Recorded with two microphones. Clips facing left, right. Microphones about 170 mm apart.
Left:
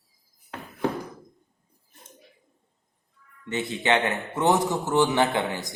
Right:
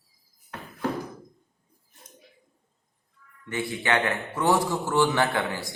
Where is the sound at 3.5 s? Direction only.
20° left (ahead or behind).